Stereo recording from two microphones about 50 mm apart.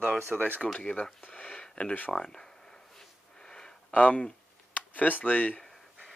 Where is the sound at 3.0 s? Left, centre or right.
Centre.